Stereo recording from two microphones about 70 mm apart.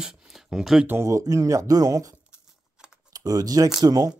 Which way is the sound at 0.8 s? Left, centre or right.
Right.